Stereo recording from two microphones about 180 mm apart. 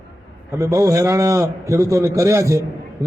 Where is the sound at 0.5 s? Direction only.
20° right (ahead or behind).